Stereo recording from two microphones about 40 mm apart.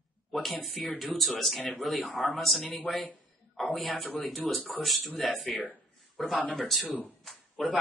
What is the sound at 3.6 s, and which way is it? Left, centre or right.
Speech, centre.